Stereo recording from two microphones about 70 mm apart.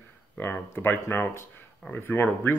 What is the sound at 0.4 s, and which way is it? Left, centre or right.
Speech, left.